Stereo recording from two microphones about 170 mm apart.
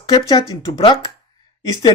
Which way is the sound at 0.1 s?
25° left (ahead or behind).